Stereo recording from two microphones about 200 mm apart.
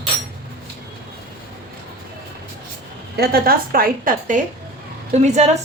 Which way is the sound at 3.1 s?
50° right (ahead or behind).